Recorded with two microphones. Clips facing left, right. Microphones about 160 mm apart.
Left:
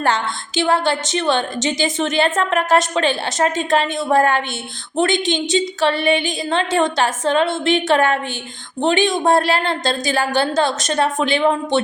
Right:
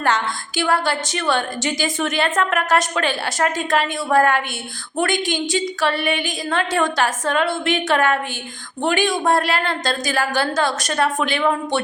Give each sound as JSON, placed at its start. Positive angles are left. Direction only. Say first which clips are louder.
{"t": 0.0, "sound": "a woman's voice", "louder": "left 1 dB", "side_deg": 25}